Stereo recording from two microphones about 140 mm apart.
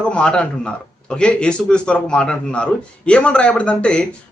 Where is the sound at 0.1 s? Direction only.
5° left (ahead or behind).